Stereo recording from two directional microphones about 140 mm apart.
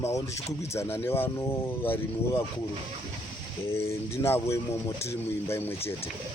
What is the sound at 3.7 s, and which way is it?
Speech, 20° left (ahead or behind).